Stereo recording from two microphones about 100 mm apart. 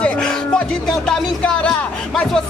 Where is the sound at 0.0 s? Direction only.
10° left (ahead or behind).